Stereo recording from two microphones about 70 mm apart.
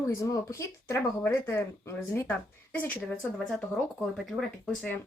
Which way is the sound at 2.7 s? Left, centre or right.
Left.